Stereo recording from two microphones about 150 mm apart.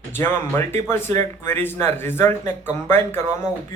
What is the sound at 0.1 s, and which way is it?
A man's voice, 15° left (ahead or behind).